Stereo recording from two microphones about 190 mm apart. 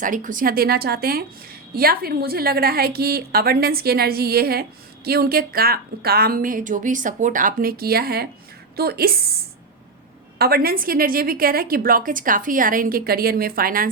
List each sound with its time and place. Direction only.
0.0 s a woman's voice: 45° right (ahead or behind)
10.3 s a woman's voice: 55° right (ahead or behind)